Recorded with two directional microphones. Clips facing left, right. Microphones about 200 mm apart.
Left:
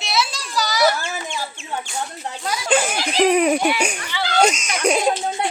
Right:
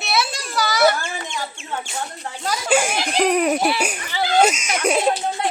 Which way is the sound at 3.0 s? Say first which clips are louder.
Left 2 dB; centre (ahead or behind).